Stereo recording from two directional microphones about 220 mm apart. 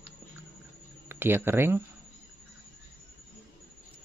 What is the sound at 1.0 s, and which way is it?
Speech, 10° right (ahead or behind).